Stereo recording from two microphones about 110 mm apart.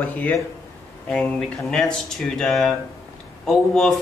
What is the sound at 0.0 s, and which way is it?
Speech, 15° left (ahead or behind).